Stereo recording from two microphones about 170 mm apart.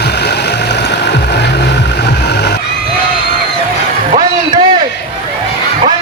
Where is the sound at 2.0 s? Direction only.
80° left.